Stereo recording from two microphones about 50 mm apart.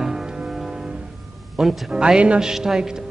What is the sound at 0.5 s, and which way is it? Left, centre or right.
Music, centre.